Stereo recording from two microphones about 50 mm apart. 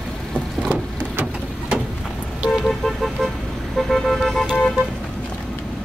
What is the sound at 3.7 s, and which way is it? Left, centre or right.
Toot, centre.